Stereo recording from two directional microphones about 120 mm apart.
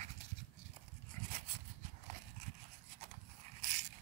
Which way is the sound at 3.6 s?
90° right.